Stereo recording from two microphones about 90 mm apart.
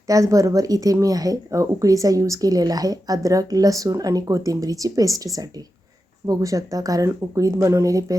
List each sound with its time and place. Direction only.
0.1 s speech: 35° right (ahead or behind)